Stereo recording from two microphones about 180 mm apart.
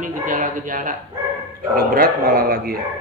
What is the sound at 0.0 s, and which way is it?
A man's voice, 50° right (ahead or behind).